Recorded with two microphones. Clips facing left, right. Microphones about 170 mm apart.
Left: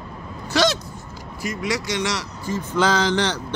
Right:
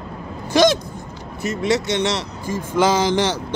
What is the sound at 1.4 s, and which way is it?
Speech, 25° right (ahead or behind).